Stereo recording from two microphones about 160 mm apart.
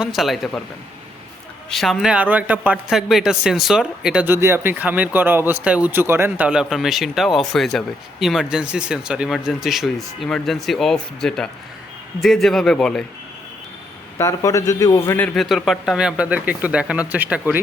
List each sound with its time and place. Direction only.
0.0 s speech: centre (ahead or behind)
1.7 s speech: centre (ahead or behind)
14.2 s a man's voice: 20° left (ahead or behind)
15.4 s speech: centre (ahead or behind)